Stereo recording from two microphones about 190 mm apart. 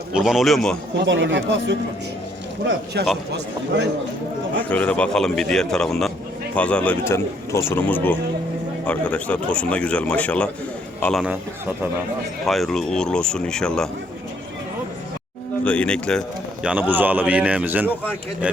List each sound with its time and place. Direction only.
0.1 s speech: 5° right (ahead or behind)
0.9 s speech: 70° right (ahead or behind)
4.7 s speech: 5° left (ahead or behind)
12.5 s speech: centre (ahead or behind)
15.6 s speech: 5° left (ahead or behind)
16.6 s speech: 10° right (ahead or behind)